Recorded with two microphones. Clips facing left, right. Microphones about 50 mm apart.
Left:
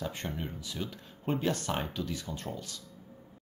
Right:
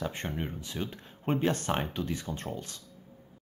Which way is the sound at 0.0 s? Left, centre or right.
Right.